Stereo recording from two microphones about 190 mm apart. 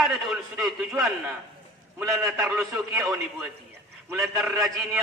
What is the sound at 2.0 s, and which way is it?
A man's voice, 15° right (ahead or behind).